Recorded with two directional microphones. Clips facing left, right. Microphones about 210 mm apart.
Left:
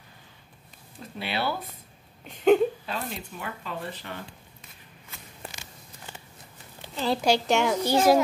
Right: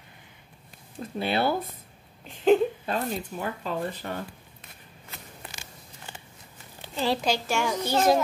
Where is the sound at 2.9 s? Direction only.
45° right (ahead or behind).